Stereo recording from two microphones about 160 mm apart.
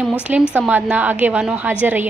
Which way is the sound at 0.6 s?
10° right (ahead or behind).